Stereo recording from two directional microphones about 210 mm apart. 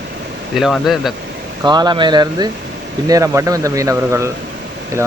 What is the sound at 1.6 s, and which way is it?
A man's voice, 20° right (ahead or behind).